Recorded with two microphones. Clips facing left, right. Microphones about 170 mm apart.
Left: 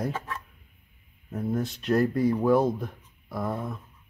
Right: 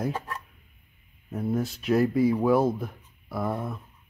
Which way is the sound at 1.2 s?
5° right (ahead or behind).